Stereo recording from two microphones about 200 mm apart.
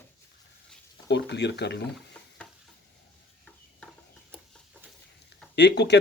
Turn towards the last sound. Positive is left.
turn(degrees=60)  # may be behind; listen again after turning